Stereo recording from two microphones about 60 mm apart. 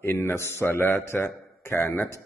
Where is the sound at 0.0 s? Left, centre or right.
Left.